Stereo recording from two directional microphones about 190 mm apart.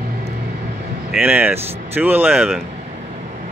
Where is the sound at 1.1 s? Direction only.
10° right (ahead or behind).